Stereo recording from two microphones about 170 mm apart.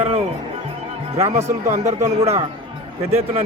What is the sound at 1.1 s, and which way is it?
Speech, 40° right (ahead or behind).